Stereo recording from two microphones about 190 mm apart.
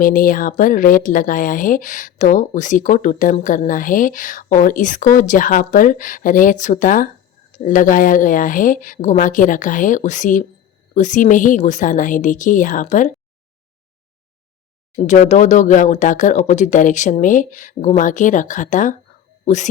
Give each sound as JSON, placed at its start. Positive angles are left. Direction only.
{"t": 0.0, "sound": "speech", "side_deg": 45}
{"t": 15.0, "sound": "speech", "side_deg": 40}